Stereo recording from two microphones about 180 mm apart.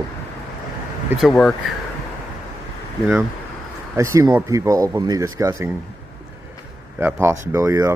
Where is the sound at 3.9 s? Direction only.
20° right (ahead or behind).